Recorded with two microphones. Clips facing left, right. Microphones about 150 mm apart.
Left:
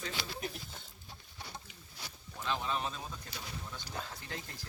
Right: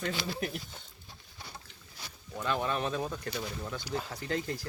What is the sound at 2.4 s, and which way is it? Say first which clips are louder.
Speech: right 4 dB; 60° right (ahead or behind).